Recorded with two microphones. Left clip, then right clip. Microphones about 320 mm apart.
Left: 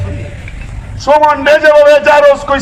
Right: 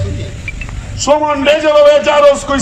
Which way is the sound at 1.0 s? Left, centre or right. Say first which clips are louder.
Left 3 dB; left.